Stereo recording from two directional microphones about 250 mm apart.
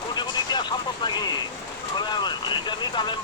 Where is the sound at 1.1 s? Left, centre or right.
Centre.